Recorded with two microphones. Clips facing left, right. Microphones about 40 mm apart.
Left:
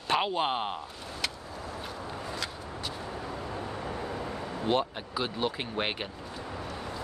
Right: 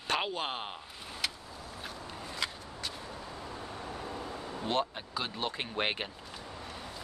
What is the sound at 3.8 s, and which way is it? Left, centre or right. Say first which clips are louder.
Vehicle: left 5 dB; left.